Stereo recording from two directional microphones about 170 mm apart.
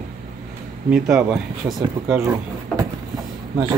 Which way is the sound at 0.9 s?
5° right (ahead or behind).